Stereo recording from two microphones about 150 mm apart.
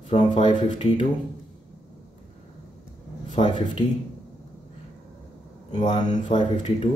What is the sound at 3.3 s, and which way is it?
Speech, 35° left (ahead or behind).